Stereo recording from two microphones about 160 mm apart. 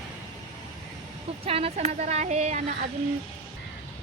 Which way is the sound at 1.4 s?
40° right (ahead or behind).